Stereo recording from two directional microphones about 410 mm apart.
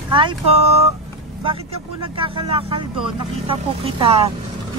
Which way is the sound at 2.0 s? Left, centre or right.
Centre.